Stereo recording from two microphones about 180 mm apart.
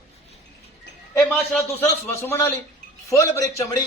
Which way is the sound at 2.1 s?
15° left (ahead or behind).